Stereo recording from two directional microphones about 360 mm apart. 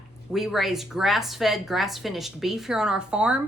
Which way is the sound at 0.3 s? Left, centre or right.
Centre.